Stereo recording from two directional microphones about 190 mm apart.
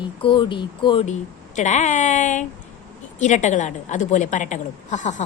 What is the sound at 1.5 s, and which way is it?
A woman's voice, 40° left (ahead or behind).